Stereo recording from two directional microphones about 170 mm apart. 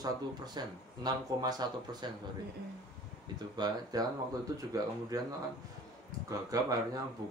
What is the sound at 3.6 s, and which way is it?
Speech, 25° right (ahead or behind).